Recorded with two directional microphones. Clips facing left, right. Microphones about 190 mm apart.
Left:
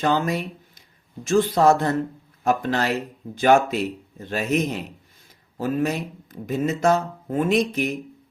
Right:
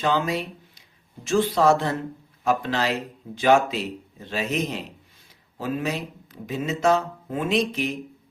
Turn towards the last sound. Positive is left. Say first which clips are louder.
# left 2 dB
turn(degrees=50)  # may be behind; listen again after turning